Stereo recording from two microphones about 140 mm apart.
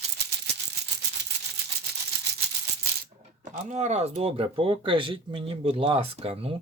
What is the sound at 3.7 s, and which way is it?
Speech, 55° right (ahead or behind).